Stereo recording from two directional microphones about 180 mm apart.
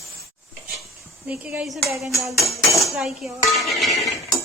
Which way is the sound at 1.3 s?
5° right (ahead or behind).